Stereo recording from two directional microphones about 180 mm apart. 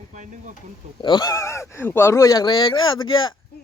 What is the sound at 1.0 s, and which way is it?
Speech, 25° left (ahead or behind).